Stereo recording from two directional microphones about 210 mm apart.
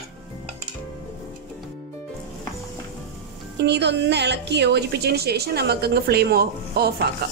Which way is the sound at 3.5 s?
55° right (ahead or behind).